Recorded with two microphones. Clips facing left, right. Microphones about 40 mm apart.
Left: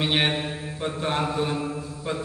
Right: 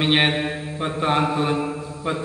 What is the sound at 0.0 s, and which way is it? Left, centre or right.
Mantra, right.